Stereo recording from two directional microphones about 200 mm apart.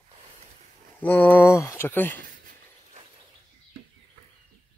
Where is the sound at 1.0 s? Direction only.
10° left (ahead or behind).